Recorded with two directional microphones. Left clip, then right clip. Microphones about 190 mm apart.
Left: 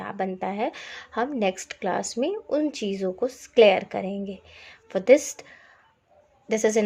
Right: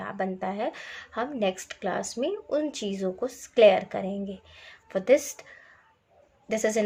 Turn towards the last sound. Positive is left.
turn(degrees=25)  # may be behind; listen again after turning